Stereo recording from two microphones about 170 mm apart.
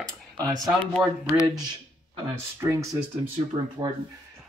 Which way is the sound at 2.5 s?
15° right (ahead or behind).